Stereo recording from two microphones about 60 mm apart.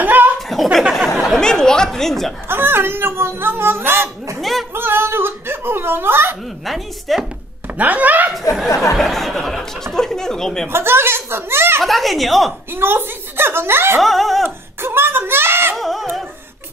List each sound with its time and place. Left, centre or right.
0.0 s chuckle: right
0.9 s speech: centre
2.4 s speech: right
4.4 s speech: centre
4.7 s speech: right
6.6 s speech: centre
7.7 s speech: right
8.9 s speech: centre
10.7 s speech: right
11.8 s speech: centre
12.7 s speech: right
14.0 s speech: centre
14.8 s speech: right
15.7 s a sound: centre